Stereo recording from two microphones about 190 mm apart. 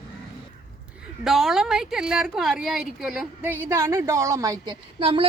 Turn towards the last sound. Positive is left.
turn(degrees=-25)  # may be behind; listen again after turning